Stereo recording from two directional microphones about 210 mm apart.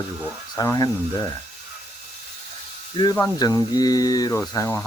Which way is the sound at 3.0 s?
20° left (ahead or behind).